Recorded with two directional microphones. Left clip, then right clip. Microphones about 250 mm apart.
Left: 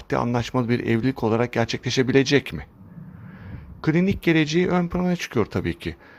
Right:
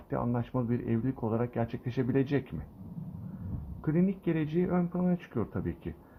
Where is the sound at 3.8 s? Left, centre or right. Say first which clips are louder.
Left 10 dB; left.